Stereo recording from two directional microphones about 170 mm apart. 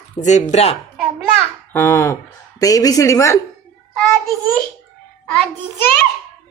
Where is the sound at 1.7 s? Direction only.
10° left (ahead or behind).